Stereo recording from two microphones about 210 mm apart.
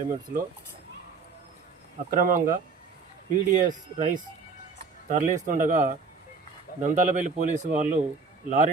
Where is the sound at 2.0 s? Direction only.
40° right (ahead or behind).